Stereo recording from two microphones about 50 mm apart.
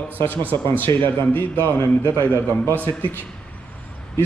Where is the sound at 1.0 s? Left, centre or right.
Left.